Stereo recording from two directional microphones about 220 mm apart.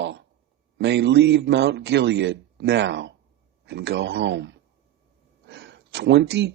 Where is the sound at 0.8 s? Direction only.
50° right (ahead or behind).